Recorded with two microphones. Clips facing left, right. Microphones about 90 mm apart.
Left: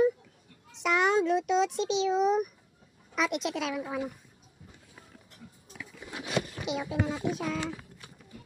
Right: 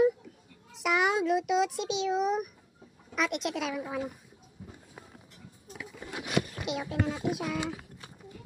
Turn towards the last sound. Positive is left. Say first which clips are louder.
# even
turn(degrees=-15)  # may be behind; listen again after turning